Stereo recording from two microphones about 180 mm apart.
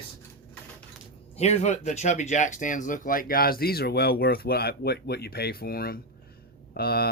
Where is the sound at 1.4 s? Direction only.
40° left (ahead or behind).